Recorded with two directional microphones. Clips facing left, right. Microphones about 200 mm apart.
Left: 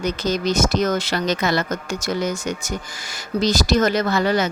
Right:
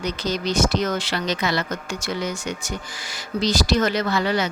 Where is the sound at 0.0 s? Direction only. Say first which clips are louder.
Left 4 dB; 45° left (ahead or behind).